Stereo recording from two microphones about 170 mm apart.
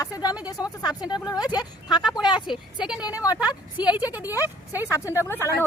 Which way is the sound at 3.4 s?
25° left (ahead or behind).